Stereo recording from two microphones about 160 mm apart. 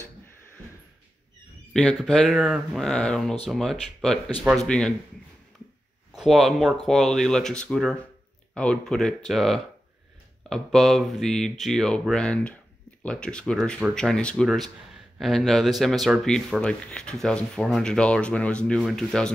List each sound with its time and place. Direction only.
1.7 s speech: 5° left (ahead or behind)
6.1 s speech: centre (ahead or behind)